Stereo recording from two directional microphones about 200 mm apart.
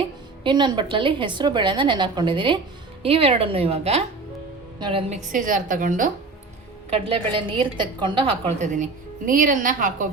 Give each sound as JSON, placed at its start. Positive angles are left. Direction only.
{"t": 0.4, "sound": "a woman's voice", "side_deg": -20}
{"t": 6.9, "sound": "a woman's voice", "side_deg": -25}